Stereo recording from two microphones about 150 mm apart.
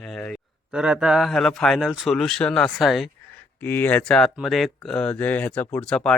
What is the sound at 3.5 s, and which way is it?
A man's voice, 15° left (ahead or behind).